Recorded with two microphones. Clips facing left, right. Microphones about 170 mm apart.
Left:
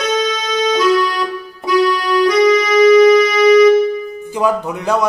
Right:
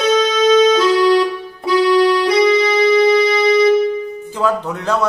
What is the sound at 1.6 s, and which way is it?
Keyboard, 30° right (ahead or behind).